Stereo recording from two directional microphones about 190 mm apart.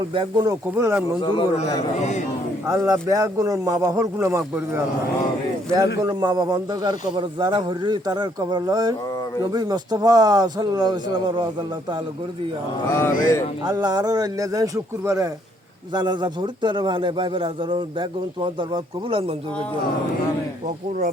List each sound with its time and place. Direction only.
0.1 s a man's voice: 25° right (ahead or behind)
0.7 s speech: 10° right (ahead or behind)
1.2 s a man's voice: 25° left (ahead or behind)
2.0 s speech: 35° left (ahead or behind)
2.6 s speech: 15° right (ahead or behind)
6.0 s a man's voice: 20° right (ahead or behind)
12.9 s speech: 15° left (ahead or behind)
13.7 s a man's voice: 20° right (ahead or behind)